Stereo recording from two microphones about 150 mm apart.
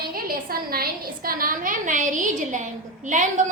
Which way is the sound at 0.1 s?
80° right.